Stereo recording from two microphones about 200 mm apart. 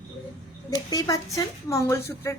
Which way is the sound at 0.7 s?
20° left (ahead or behind).